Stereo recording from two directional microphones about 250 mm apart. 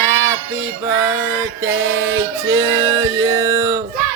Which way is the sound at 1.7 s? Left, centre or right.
Right.